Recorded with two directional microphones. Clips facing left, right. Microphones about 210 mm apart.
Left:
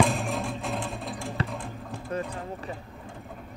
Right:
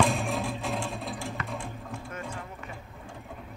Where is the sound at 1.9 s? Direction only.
35° left (ahead or behind).